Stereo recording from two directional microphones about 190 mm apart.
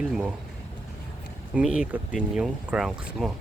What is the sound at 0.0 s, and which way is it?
Speech, 5° right (ahead or behind).